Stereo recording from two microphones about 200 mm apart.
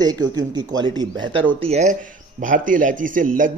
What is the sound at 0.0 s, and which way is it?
Speech, 20° right (ahead or behind).